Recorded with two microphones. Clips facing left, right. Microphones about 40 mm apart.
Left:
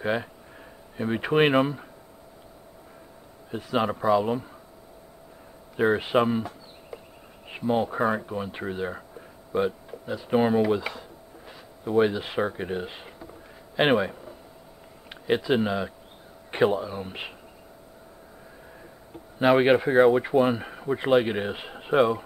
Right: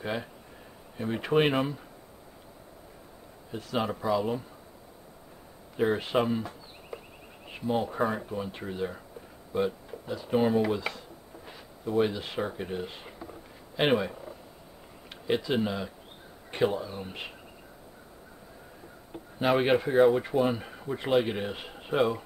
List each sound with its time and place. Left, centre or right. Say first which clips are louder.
0.0 s speech: left 6 dB; left
3.5 s speech: left 5 dB; centre
5.8 s speech: left 4 dB; centre
6.9 s a sound: even; centre
7.4 s speech: left 4 dB; centre
19.4 s speech: left 5 dB; centre
20.2 s speech: left 5 dB; centre